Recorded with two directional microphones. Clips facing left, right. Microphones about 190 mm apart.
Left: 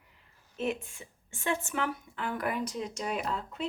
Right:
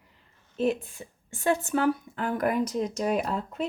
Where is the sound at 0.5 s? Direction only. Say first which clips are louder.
Right 6 dB; 35° right (ahead or behind).